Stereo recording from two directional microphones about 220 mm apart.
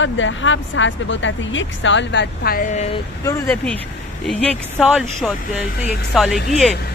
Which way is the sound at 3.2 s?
10° left (ahead or behind).